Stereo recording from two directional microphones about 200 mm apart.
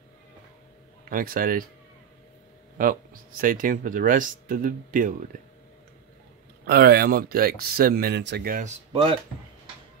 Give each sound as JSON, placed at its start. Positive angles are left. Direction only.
{"t": 1.1, "sound": "speech", "side_deg": -45}
{"t": 2.8, "sound": "speech", "side_deg": -45}
{"t": 6.6, "sound": "speech", "side_deg": -50}